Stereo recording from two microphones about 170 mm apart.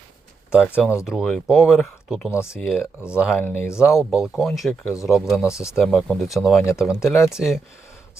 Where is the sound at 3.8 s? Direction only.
5° right (ahead or behind).